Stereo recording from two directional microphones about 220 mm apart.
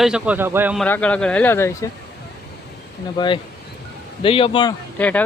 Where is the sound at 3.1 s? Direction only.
20° left (ahead or behind).